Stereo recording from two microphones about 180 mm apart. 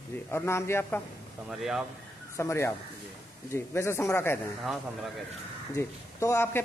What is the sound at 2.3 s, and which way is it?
A man's voice, 15° left (ahead or behind).